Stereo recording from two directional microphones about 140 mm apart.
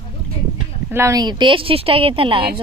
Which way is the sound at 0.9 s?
20° right (ahead or behind).